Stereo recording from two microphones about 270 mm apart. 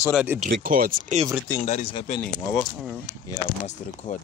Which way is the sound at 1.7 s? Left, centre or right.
Left.